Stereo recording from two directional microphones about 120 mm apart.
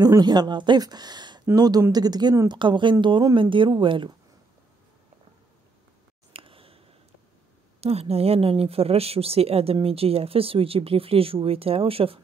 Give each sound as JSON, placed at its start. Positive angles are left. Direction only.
{"t": 0.0, "sound": "speech", "side_deg": -35}
{"t": 6.3, "sound": "a sound", "side_deg": -50}
{"t": 7.8, "sound": "speech", "side_deg": -60}